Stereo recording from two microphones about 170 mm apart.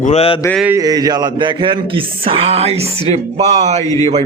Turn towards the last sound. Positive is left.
turn(degrees=-40)  # may be behind; listen again after turning